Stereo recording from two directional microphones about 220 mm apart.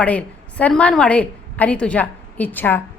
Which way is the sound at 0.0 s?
5° left (ahead or behind).